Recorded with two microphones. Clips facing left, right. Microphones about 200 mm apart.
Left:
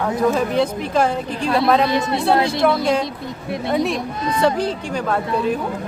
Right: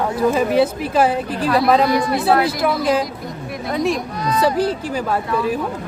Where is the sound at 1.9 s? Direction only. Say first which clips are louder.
Right 2 dB; 25° left (ahead or behind).